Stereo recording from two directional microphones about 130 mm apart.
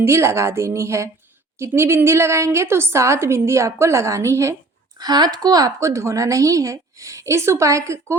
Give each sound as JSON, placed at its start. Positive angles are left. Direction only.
{"t": 0.0, "sound": "a woman's voice", "side_deg": -20}
{"t": 4.9, "sound": "a woman's voice", "side_deg": -30}